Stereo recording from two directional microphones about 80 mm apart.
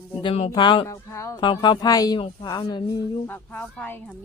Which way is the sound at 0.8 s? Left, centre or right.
Left.